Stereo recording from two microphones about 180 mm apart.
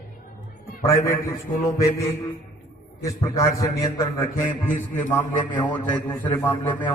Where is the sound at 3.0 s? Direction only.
20° left (ahead or behind).